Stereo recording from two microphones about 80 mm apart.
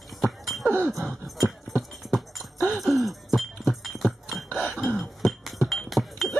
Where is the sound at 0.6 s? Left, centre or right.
Right.